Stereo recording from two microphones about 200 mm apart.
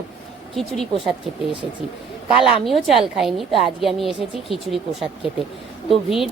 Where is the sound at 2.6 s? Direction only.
Centre (ahead or behind).